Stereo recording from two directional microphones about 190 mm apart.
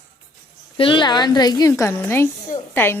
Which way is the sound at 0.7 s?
25° left (ahead or behind).